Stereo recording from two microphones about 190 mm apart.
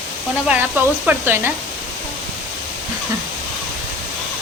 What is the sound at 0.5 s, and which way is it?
Speech, 10° right (ahead or behind).